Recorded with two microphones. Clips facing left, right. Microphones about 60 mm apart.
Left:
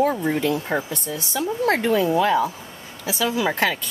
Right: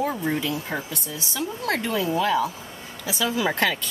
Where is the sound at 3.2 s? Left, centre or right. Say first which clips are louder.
Left 2 dB; centre.